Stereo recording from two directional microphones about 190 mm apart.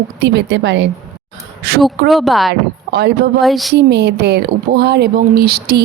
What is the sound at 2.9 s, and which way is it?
Speech, 60° right (ahead or behind).